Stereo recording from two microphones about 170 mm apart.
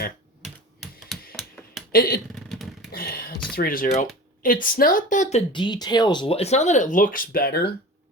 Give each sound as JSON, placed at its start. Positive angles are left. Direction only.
{"t": 0.9, "sound": "typewriter", "side_deg": 0}
{"t": 1.9, "sound": "speech", "side_deg": 60}
{"t": 2.3, "sound": "vehicle", "side_deg": 0}
{"t": 2.9, "sound": "beatboxing", "side_deg": 60}
{"t": 3.5, "sound": "speech", "side_deg": 55}